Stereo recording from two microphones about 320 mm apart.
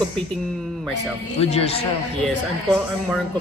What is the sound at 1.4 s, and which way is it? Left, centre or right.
Speech, centre.